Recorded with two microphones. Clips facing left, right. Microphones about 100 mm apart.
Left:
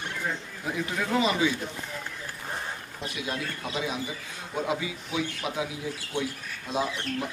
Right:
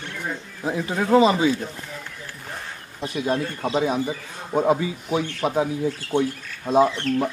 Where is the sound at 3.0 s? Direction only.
35° right (ahead or behind).